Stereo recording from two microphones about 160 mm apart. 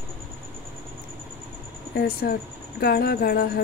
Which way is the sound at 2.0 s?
70° left (ahead or behind).